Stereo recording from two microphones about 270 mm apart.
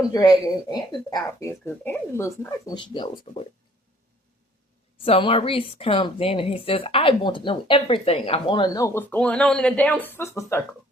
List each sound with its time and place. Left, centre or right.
0.1 s speech: centre
5.0 s speech: left